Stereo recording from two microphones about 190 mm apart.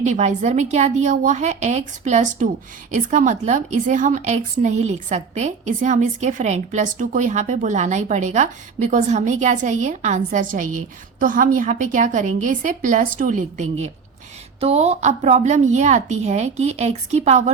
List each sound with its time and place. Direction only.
0.0 s a woman's voice: 40° right (ahead or behind)